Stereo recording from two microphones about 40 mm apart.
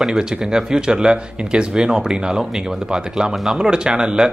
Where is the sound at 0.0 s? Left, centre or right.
Centre.